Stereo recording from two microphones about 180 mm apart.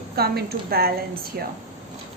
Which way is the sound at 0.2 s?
60° right (ahead or behind).